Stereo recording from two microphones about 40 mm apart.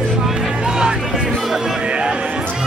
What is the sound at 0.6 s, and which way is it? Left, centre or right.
Music, centre.